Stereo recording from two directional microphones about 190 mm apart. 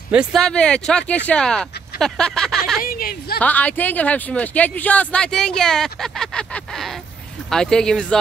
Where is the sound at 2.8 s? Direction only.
50° left (ahead or behind).